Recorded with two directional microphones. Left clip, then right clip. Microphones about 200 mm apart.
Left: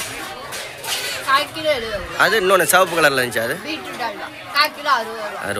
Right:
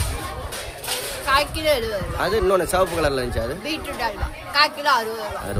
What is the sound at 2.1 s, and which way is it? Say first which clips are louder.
Speech: left 6 dB; 5° right (ahead or behind).